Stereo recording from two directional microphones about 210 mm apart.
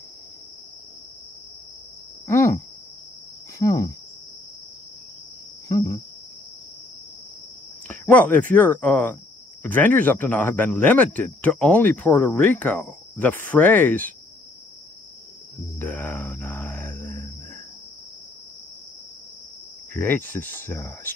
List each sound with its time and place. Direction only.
2.2 s cricket: 15° left (ahead or behind)
3.6 s speech: 15° left (ahead or behind)
5.7 s cricket: 15° left (ahead or behind)
7.9 s speech: 5° left (ahead or behind)
15.8 s grunt: 10° left (ahead or behind)
19.9 s speech: 10° left (ahead or behind)